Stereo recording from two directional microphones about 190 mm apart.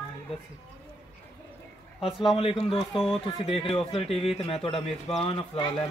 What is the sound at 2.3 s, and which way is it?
A man's voice, 30° left (ahead or behind).